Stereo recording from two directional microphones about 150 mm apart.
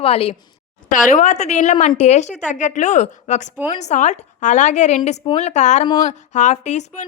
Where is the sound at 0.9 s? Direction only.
55° left (ahead or behind).